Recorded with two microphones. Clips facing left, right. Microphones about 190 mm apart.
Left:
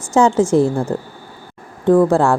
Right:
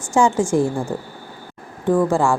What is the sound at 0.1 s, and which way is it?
Speech, 20° left (ahead or behind).